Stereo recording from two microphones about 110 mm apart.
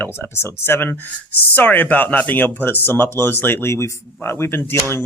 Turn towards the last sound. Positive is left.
turn(degrees=20)  # may be behind; listen again after turning